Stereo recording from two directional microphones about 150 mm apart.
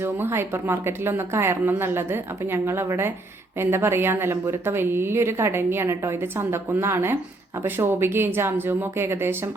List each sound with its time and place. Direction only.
0.0 s a woman's voice: 15° right (ahead or behind)